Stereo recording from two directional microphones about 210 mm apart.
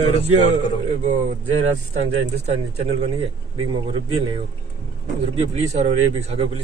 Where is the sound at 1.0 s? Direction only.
35° right (ahead or behind).